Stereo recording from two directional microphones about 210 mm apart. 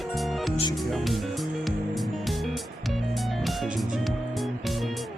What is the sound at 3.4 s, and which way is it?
Music, centre (ahead or behind).